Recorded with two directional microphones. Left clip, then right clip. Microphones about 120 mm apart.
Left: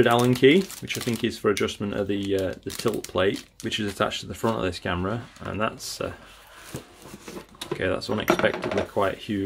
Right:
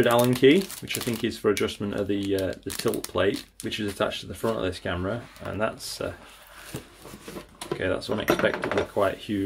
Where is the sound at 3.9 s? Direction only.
40° left (ahead or behind).